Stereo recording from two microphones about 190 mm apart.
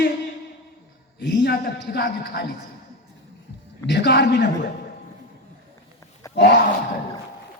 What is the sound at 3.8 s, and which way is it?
Speech, 65° left (ahead or behind).